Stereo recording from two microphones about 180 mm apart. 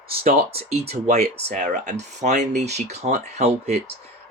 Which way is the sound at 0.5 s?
35° right (ahead or behind).